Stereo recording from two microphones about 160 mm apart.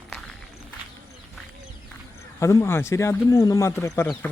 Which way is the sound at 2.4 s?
15° left (ahead or behind).